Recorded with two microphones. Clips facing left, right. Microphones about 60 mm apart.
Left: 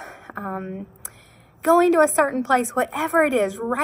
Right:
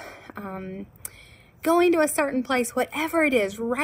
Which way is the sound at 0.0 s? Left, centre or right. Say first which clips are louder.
Left 3 dB; right.